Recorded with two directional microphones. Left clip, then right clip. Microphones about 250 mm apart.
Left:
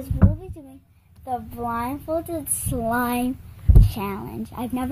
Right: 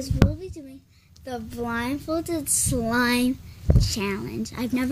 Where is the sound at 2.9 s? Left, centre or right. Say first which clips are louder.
Even; left.